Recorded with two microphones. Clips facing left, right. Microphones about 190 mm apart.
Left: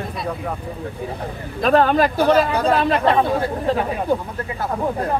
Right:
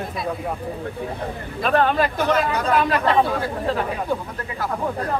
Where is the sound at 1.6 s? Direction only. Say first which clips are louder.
Left 4 dB; 35° left (ahead or behind).